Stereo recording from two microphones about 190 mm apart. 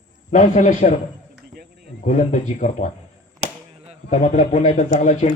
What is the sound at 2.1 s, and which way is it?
Speech, 40° left (ahead or behind).